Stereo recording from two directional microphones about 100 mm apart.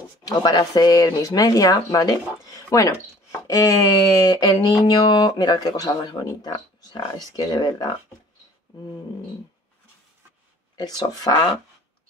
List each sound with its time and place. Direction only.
0.2 s speech: 40° left (ahead or behind)
10.8 s speech: 45° left (ahead or behind)